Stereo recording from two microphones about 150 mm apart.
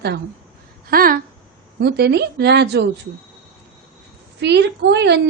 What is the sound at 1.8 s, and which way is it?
A woman's voice, 90° right.